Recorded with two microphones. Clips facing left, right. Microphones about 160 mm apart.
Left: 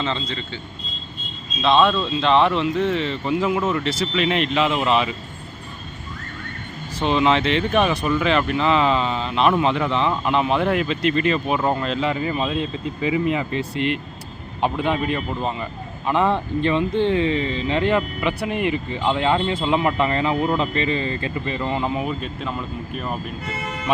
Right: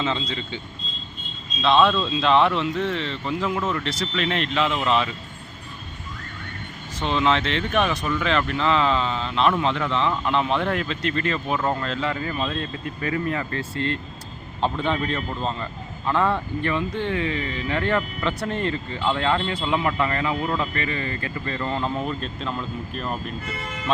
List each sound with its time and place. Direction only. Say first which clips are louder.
0.0 s speech: even; 10° right (ahead or behind)
1.6 s speech: left 1 dB; centre (ahead or behind)
7.0 s speech: left 3 dB; 15° left (ahead or behind)